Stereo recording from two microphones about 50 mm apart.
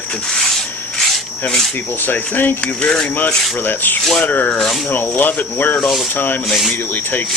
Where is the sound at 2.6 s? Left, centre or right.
Centre.